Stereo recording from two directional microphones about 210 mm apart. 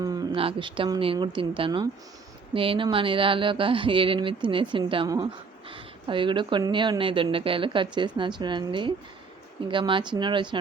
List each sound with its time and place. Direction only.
0.0 s speech: 20° right (ahead or behind)